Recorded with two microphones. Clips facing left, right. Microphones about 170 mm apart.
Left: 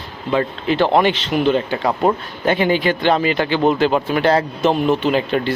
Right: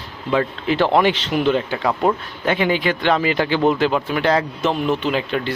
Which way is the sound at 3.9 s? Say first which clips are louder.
Left 3 dB; 30° left (ahead or behind).